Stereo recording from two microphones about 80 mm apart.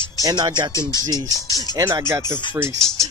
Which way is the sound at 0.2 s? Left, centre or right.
Right.